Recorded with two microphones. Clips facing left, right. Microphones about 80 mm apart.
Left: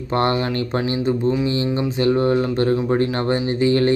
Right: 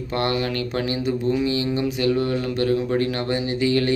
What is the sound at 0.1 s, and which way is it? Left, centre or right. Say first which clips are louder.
Speech: left 4 dB; left.